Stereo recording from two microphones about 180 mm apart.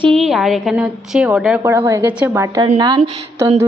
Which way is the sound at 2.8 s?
25° right (ahead or behind).